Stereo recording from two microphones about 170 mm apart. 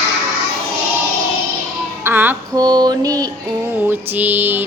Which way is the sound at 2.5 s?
25° right (ahead or behind).